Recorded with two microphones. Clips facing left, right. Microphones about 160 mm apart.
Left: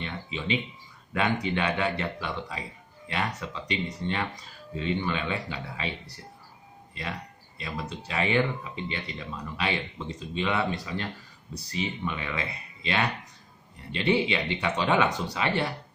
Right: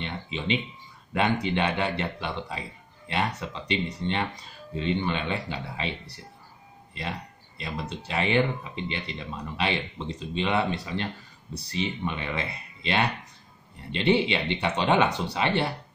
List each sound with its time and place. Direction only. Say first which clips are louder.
0.0 s a sound: right 2 dB; 25° right (ahead or behind)
1.1 s speech: right 2 dB; 25° right (ahead or behind)
7.0 s speech: right 2 dB; 25° right (ahead or behind)